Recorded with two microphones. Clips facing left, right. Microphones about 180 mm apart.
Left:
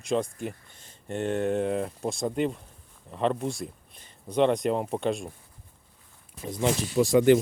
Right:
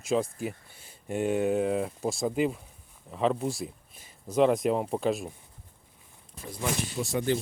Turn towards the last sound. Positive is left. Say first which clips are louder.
# left 9 dB
turn(degrees=90)